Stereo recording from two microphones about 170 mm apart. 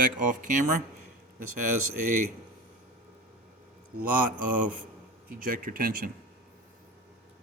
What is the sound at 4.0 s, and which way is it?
Speech, 50° right (ahead or behind).